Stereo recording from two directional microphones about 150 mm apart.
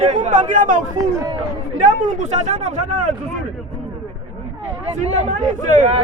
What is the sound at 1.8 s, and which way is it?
Speech, 55° right (ahead or behind).